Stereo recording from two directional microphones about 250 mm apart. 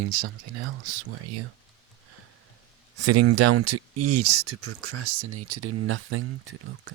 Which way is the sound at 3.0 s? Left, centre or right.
Right.